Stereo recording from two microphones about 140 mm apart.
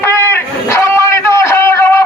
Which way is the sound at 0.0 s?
15° left (ahead or behind).